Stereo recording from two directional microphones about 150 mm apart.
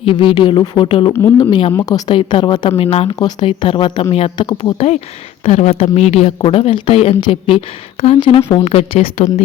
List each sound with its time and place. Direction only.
0.0 s speech: 35° left (ahead or behind)
4.4 s speech: 30° left (ahead or behind)
5.5 s speech: 45° left (ahead or behind)